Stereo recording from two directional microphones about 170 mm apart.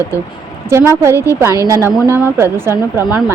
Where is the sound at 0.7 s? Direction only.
15° right (ahead or behind).